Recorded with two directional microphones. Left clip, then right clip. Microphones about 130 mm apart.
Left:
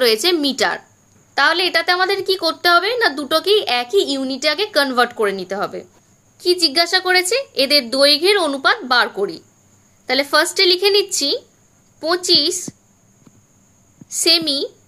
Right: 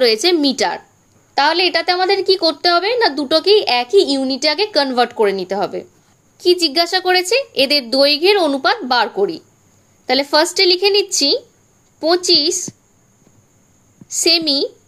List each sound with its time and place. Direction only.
0.0 s a woman's voice: 20° right (ahead or behind)
14.0 s a woman's voice: 25° right (ahead or behind)